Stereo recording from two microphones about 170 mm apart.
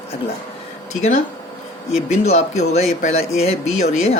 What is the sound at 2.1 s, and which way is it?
Speech, 40° left (ahead or behind).